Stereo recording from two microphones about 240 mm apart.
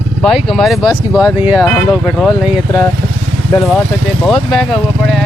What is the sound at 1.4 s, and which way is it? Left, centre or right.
Speech, centre.